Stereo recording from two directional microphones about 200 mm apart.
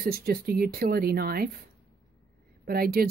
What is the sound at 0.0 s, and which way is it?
Speech, 50° right (ahead or behind).